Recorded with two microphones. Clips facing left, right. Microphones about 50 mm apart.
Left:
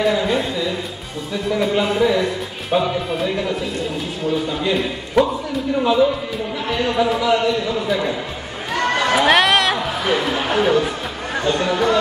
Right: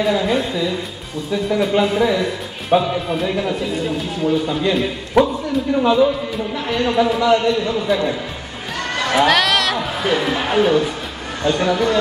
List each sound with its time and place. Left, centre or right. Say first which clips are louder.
0.0 s a man's voice: even; centre
8.9 s run: even; centre
9.8 s a sound: right 1 dB; centre
10.6 s a man's voice: right 1 dB; centre